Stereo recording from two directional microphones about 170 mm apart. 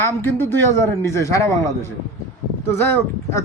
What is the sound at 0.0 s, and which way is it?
Speech, 10° left (ahead or behind).